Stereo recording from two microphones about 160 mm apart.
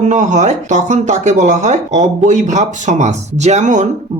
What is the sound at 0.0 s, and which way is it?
Speech, 50° right (ahead or behind).